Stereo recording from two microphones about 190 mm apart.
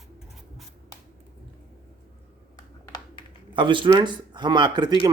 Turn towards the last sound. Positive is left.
turn(degrees=-20)  # may be behind; listen again after turning